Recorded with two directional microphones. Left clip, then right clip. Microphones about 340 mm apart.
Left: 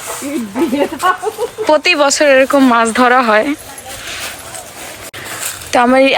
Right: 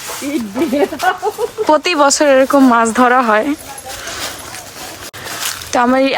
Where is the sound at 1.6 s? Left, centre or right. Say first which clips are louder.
Left 1 dB; centre.